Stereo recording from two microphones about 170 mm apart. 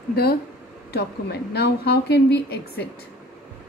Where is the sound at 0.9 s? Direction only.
70° left (ahead or behind).